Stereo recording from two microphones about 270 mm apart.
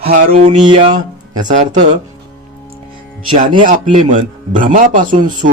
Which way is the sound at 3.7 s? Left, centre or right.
Right.